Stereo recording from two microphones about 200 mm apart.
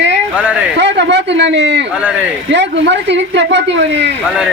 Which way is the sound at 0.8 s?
60° right (ahead or behind).